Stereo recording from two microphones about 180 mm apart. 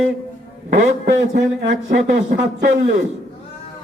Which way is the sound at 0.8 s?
45° right (ahead or behind).